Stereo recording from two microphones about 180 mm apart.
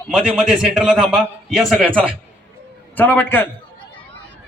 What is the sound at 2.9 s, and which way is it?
Speech, 10° left (ahead or behind).